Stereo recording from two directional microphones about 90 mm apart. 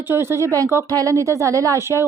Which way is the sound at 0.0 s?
25° right (ahead or behind).